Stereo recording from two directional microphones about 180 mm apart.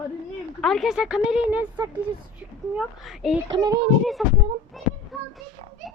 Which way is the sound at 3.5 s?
25° right (ahead or behind).